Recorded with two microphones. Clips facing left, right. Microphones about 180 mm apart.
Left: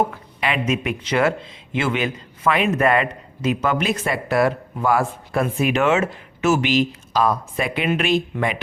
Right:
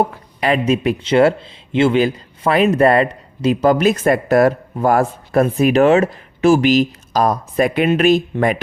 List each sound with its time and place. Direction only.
0.0 s speech: 40° right (ahead or behind)